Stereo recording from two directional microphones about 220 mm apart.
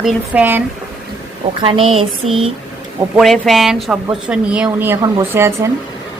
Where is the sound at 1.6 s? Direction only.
25° right (ahead or behind).